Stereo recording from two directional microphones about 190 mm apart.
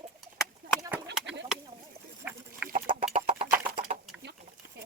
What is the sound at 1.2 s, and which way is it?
Bird, 70° right (ahead or behind).